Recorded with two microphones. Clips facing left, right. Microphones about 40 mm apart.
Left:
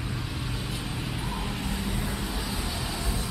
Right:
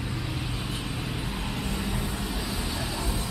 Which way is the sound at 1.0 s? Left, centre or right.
Centre.